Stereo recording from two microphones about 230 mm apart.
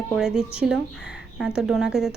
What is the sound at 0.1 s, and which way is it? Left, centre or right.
A woman's voice, centre.